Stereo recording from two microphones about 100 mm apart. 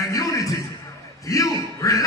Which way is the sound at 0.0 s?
30° left (ahead or behind).